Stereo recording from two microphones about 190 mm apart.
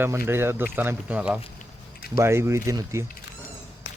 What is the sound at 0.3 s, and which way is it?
Speech, 10° right (ahead or behind).